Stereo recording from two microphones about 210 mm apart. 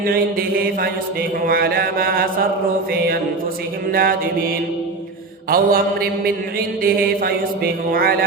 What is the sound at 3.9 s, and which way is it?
Mantra, 45° right (ahead or behind).